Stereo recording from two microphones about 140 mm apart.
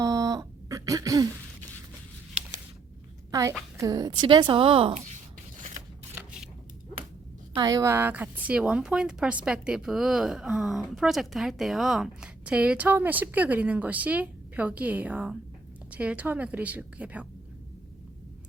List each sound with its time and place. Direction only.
0.0 s a sound: 25° right (ahead or behind)
3.8 s a woman's voice: 25° right (ahead or behind)
7.5 s a woman's voice: 25° right (ahead or behind); by 17.2 s 10° right (ahead or behind)